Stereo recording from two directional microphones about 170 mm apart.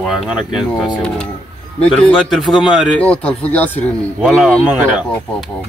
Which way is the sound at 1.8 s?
5° left (ahead or behind).